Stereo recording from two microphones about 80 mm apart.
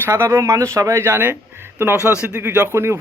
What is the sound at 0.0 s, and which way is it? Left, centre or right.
Speech, right.